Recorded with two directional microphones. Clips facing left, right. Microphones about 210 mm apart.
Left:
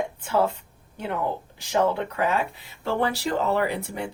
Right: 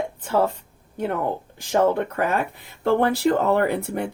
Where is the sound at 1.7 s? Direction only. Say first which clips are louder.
Right 4 dB; 50° right (ahead or behind).